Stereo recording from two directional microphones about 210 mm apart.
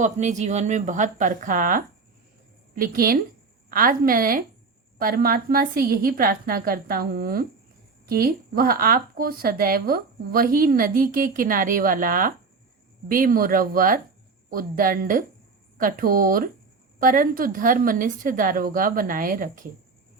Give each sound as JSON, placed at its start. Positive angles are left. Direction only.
{"t": 0.0, "sound": "a woman's voice", "side_deg": -35}